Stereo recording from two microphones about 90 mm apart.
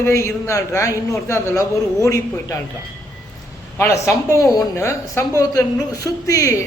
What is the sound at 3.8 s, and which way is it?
A man's voice, 30° left (ahead or behind).